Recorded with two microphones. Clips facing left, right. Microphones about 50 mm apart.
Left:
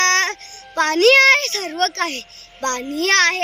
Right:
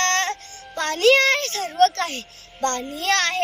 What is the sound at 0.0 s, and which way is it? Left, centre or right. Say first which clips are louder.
Music: left 4 dB; left.